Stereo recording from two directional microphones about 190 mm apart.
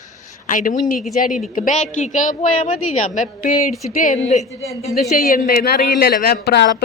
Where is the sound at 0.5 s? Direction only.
45° left (ahead or behind).